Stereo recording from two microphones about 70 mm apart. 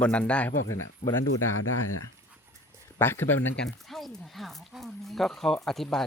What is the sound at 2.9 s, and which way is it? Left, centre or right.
Speech, left.